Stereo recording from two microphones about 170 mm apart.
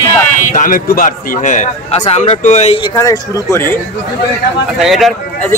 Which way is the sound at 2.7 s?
25° left (ahead or behind).